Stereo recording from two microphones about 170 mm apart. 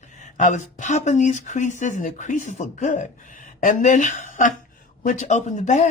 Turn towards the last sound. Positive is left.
turn(degrees=45)  # may be behind; listen again after turning